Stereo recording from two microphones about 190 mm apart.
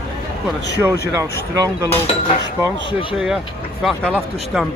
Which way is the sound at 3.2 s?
Centre (ahead or behind).